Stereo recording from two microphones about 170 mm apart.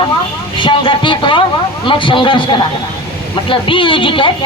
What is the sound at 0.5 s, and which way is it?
Speech, 30° left (ahead or behind).